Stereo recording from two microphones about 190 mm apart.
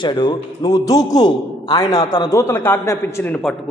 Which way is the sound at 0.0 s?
25° left (ahead or behind).